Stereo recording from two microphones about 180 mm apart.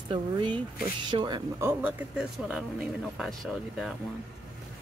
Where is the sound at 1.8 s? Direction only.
10° right (ahead or behind).